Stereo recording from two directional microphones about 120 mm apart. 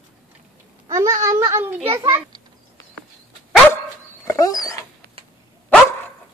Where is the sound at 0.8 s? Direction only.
25° right (ahead or behind).